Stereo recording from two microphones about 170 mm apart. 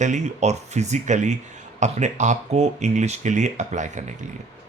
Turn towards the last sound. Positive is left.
turn(degrees=-45)  # may be behind; listen again after turning